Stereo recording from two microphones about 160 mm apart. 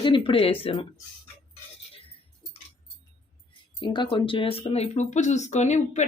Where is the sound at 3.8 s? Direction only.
30° left (ahead or behind); by 6.1 s 45° left (ahead or behind).